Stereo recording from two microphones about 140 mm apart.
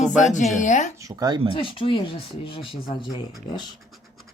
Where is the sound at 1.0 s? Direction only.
25° right (ahead or behind).